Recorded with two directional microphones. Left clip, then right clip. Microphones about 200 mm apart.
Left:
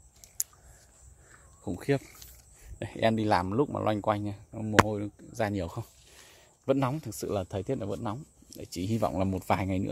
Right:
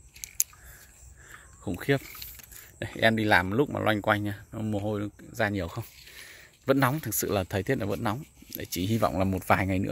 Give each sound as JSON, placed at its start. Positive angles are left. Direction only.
{"t": 0.2, "sound": "scissors", "side_deg": 25}
{"t": 1.6, "sound": "speech", "side_deg": 5}